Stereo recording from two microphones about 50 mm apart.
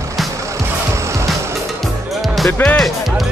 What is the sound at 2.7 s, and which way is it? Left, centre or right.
Speech, centre.